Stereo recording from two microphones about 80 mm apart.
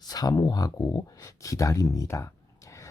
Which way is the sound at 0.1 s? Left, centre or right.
Left.